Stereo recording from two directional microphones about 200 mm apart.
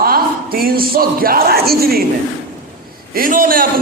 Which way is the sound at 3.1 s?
45° right (ahead or behind).